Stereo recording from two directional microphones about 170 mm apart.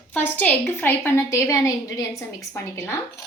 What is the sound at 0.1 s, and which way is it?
A woman's voice, 10° left (ahead or behind).